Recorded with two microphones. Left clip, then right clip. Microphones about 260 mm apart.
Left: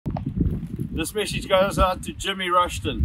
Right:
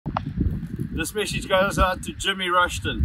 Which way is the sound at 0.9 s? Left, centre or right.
Right.